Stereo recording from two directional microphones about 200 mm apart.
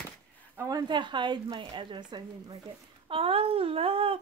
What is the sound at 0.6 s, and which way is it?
Speech, 20° right (ahead or behind).